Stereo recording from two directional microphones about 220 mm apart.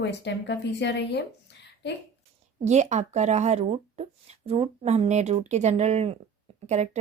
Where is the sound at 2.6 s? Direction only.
30° right (ahead or behind).